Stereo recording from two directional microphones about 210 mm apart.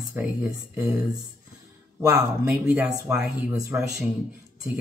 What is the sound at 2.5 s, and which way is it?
Speech, 5° right (ahead or behind).